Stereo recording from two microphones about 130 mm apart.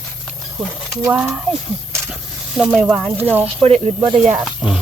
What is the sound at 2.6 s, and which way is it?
Speech, 10° right (ahead or behind).